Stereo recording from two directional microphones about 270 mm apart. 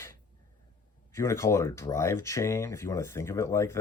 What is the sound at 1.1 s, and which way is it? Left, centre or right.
Speech, centre.